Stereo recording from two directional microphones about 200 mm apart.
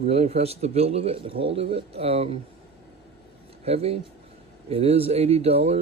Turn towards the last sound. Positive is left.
turn(degrees=-30)  # may be behind; listen again after turning